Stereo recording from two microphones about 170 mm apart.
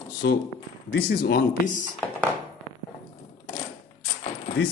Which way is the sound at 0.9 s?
70° left (ahead or behind).